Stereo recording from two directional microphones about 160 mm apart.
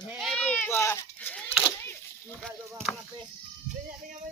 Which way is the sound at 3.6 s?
50° right (ahead or behind).